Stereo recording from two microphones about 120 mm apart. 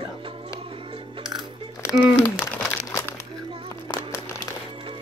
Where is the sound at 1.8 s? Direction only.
20° left (ahead or behind).